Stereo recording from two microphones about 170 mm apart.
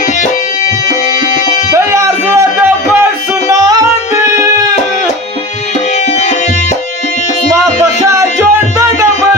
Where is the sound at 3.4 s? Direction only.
20° right (ahead or behind).